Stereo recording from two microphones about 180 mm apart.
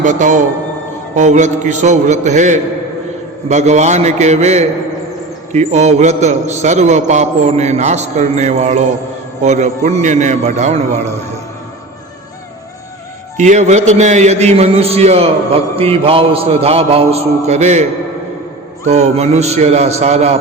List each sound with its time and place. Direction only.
0.0 s a man's voice: 45° right (ahead or behind)
13.3 s a man's voice: 40° right (ahead or behind)
18.9 s a man's voice: 35° right (ahead or behind)